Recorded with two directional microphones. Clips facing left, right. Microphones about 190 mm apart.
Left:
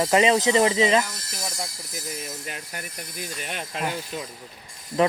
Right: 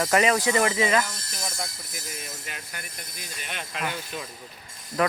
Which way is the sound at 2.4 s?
40° left (ahead or behind).